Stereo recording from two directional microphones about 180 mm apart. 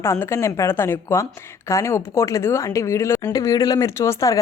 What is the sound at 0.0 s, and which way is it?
A woman's voice, 15° left (ahead or behind).